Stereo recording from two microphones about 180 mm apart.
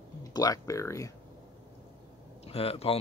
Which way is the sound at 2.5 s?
35° left (ahead or behind).